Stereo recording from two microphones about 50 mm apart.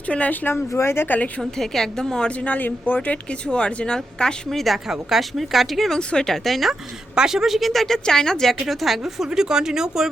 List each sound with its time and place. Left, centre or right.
0.1 s speech: left
0.7 s speech: left
1.0 s speech: left
1.4 s a woman's voice: centre
2.4 s speech: left
3.4 s speech: left
4.5 s speech: centre
6.0 s speech: left
6.2 s speech: centre
8.6 s speech: centre